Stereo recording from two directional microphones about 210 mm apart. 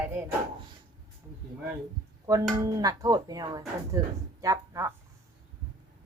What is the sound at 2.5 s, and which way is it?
Music, 15° right (ahead or behind).